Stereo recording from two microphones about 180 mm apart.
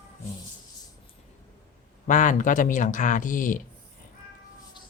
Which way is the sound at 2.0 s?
45° left (ahead or behind).